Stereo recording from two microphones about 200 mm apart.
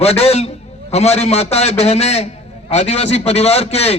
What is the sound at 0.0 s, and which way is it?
A man's voice, 30° left (ahead or behind).